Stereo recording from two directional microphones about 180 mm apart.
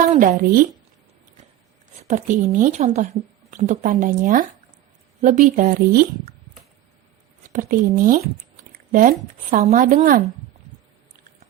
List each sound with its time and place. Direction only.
0.2 s a woman's voice: 50° right (ahead or behind)
2.0 s a woman's voice: 45° right (ahead or behind)
7.5 s a woman's voice: 50° right (ahead or behind)